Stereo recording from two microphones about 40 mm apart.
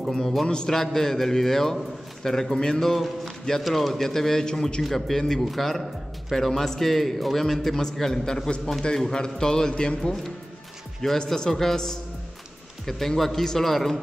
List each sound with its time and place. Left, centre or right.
0.1 s a man's voice: centre
0.5 s a sound: centre
0.7 s a man's voice: centre
2.9 s a man's voice: centre
4.8 s a man's voice: centre